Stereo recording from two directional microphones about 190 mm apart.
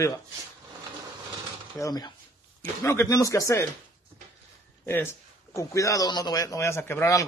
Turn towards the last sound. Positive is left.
turn(degrees=15)  # may be behind; listen again after turning